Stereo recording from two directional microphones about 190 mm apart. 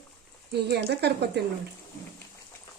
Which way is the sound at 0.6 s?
60° right (ahead or behind).